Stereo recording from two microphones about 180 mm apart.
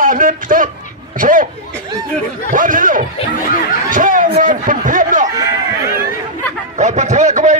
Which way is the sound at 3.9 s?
50° right (ahead or behind).